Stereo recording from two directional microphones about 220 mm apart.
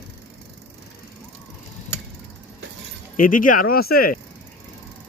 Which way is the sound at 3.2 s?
40° left (ahead or behind).